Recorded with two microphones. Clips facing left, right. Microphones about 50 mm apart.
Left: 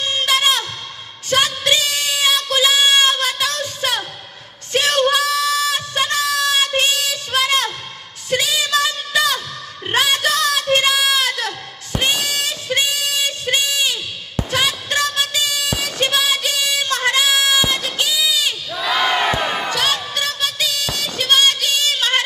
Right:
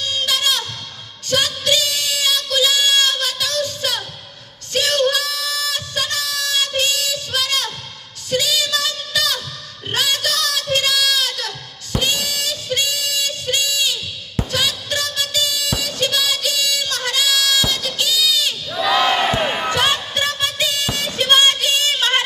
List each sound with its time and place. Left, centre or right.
0.0 s music: left
1.3 s a sound: left
8.3 s singing: left
9.9 s a sound: left
11.9 s music: left
16.0 s child singing: left
18.7 s crowd: centre
19.7 s music: right
21.2 s a sound: centre
21.9 s singing: centre